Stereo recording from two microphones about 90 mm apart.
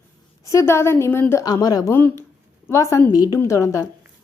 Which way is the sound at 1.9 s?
25° left (ahead or behind).